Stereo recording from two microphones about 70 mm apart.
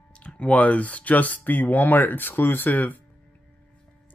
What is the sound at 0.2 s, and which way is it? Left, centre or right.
Speech, centre.